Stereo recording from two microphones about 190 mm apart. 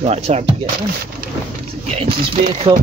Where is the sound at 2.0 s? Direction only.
25° right (ahead or behind).